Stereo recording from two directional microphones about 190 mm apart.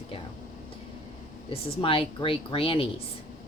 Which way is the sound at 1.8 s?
30° left (ahead or behind).